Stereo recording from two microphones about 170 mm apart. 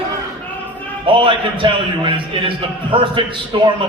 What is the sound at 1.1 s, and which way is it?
A man's voice, 30° right (ahead or behind).